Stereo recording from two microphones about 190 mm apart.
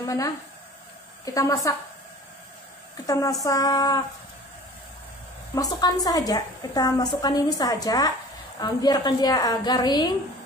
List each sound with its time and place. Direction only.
0.0 s a woman's voice: 15° left (ahead or behind)
3.1 s a woman's voice: 20° left (ahead or behind)
5.5 s a woman's voice: 20° left (ahead or behind)